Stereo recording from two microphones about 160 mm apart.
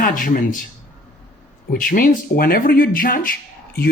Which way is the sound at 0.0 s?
60° left (ahead or behind).